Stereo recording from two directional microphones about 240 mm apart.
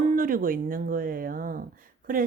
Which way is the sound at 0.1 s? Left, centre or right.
Right.